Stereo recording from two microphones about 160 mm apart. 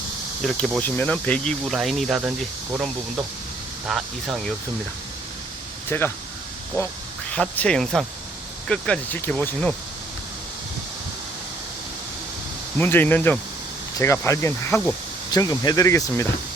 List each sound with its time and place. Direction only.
0.4 s speech: centre (ahead or behind)
3.8 s speech: centre (ahead or behind)
5.9 s speech: 15° left (ahead or behind)
7.3 s speech: 5° left (ahead or behind)
12.7 s speech: 10° left (ahead or behind)